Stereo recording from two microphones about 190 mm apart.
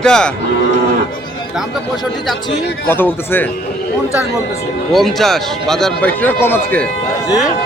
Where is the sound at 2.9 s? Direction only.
10° left (ahead or behind).